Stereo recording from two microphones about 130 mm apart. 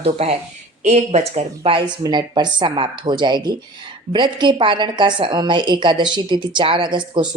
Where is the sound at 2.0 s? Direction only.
35° right (ahead or behind).